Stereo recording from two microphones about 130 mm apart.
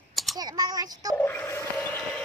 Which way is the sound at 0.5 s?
30° right (ahead or behind).